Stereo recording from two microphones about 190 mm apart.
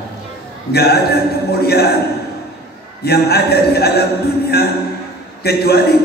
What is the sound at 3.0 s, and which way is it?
A man's voice, 55° left (ahead or behind).